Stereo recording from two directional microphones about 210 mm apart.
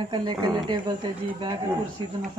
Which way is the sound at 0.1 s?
20° right (ahead or behind).